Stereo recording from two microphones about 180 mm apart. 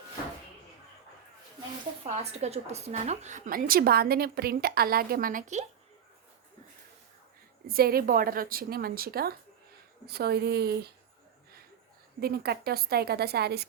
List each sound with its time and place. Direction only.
2.0 s a woman's voice: 40° right (ahead or behind)
7.7 s a woman's voice: 55° right (ahead or behind)
12.2 s a woman's voice: 60° right (ahead or behind)